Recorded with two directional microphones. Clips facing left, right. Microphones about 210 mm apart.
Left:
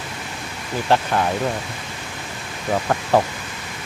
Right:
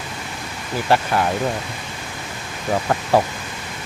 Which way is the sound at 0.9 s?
Centre (ahead or behind).